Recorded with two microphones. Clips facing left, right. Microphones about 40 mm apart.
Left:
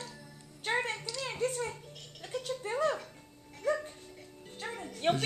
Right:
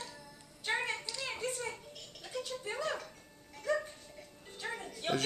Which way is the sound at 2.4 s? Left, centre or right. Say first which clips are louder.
Left 7 dB; left.